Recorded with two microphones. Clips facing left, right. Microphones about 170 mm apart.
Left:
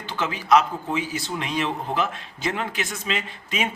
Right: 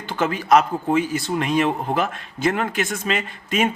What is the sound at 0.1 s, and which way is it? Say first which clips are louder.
A man's voice: right 3 dB; 50° right (ahead or behind).